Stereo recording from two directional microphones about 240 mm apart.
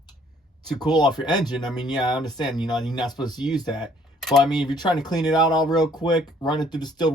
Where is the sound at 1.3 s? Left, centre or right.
Centre.